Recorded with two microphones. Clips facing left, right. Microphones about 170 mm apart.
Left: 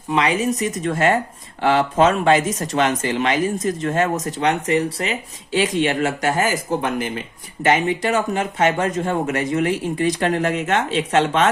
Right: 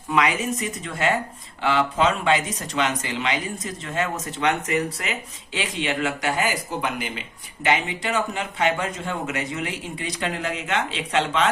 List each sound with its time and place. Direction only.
0.1 s speech: 30° left (ahead or behind); by 11.4 s 45° left (ahead or behind)